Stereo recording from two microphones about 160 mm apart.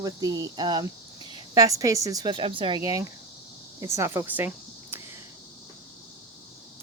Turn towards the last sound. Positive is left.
turn(degrees=-10)  # may be behind; listen again after turning